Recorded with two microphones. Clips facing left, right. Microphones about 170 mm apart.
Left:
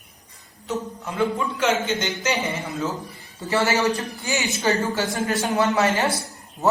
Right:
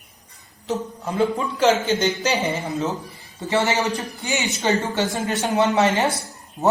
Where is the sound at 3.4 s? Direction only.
20° right (ahead or behind).